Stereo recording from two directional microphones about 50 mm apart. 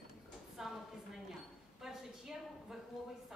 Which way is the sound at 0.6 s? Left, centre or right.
Centre.